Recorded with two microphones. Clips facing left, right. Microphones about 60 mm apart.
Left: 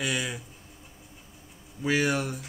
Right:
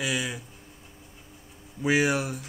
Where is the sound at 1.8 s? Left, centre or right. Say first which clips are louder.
Right 2 dB; centre.